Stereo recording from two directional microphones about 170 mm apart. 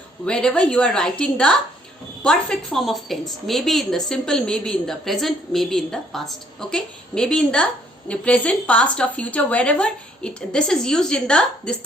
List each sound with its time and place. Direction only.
0.3 s a woman's voice: 5° left (ahead or behind)